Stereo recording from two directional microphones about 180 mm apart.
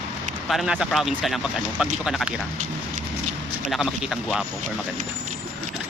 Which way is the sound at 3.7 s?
Centre (ahead or behind).